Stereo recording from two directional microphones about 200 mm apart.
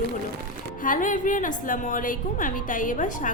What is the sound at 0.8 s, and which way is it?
A woman's voice, 40° left (ahead or behind).